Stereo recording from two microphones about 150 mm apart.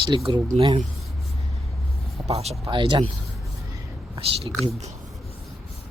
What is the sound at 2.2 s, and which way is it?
Speech, 45° right (ahead or behind).